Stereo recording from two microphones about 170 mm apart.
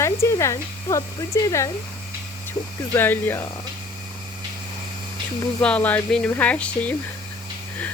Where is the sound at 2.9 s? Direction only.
10° left (ahead or behind).